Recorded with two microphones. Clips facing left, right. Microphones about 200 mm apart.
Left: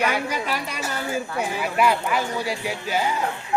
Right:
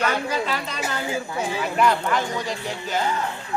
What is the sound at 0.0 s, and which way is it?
Speech, 10° left (ahead or behind).